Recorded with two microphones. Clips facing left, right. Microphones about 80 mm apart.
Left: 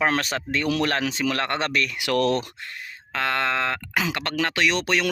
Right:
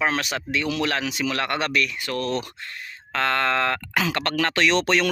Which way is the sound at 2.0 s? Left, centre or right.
Left.